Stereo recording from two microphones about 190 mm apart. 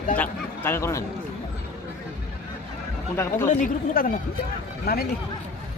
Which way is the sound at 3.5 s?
45° left (ahead or behind).